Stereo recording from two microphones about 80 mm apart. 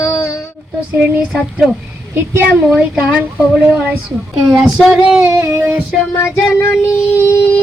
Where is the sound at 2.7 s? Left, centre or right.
Centre.